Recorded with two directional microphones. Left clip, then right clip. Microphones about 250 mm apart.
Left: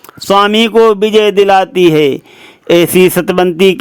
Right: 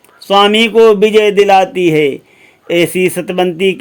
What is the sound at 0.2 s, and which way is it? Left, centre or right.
A man's voice, left.